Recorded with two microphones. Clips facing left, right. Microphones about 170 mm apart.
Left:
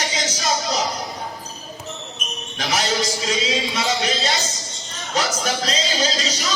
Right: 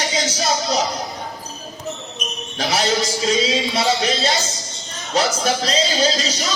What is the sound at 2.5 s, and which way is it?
Speech, 30° right (ahead or behind).